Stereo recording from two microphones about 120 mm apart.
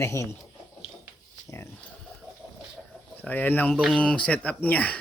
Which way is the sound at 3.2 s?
15° left (ahead or behind).